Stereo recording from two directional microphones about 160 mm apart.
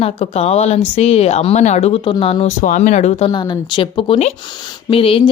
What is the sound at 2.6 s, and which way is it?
Speech, 50° left (ahead or behind).